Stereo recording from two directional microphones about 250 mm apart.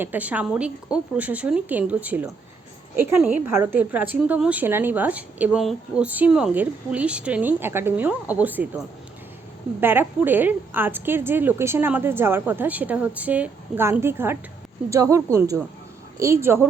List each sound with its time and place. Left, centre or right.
0.0 s a woman's voice: centre
9.8 s a woman's voice: centre